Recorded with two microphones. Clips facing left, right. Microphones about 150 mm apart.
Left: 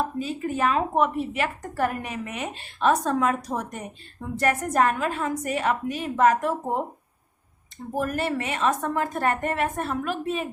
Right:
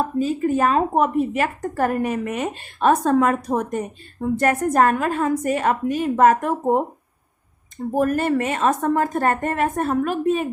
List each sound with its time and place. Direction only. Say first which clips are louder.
0.0 s a woman's voice: right 7 dB; 40° right (ahead or behind)
7.9 s a woman's voice: right 7 dB; 45° right (ahead or behind)